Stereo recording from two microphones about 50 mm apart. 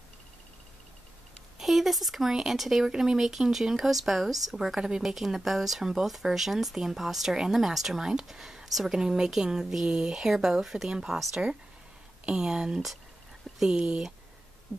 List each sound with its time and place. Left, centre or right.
1.6 s speech: centre